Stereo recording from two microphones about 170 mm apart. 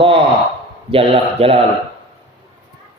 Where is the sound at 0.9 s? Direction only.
35° right (ahead or behind).